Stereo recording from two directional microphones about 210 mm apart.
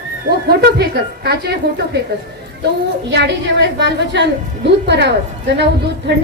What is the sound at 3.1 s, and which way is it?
A woman's voice, 55° right (ahead or behind).